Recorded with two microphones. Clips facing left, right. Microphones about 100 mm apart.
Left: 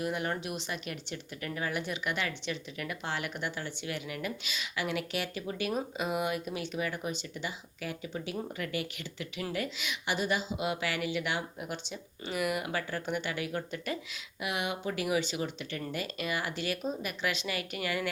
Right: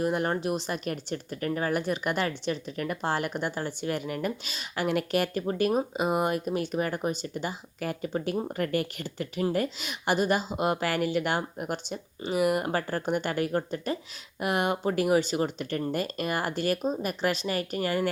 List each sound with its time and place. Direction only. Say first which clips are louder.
0.0 s speech: right 6 dB; 45° right (ahead or behind)
14.4 s speech: right 7 dB; 45° right (ahead or behind)